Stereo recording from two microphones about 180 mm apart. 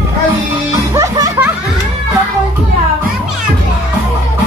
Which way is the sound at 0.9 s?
15° right (ahead or behind).